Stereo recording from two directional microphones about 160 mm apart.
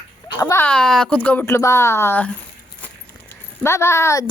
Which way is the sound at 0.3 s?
20° left (ahead or behind).